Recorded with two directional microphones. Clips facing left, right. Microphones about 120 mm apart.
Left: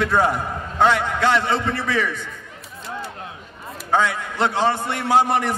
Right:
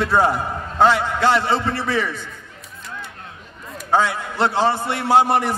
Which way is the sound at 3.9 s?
30° right (ahead or behind).